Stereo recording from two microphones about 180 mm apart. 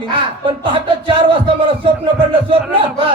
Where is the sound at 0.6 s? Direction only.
30° right (ahead or behind).